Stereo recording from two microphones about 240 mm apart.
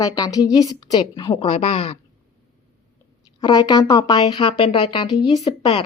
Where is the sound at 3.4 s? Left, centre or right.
Centre.